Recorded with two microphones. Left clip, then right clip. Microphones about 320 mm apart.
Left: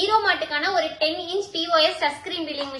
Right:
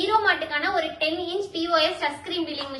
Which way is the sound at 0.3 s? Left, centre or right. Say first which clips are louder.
Left 1 dB; left.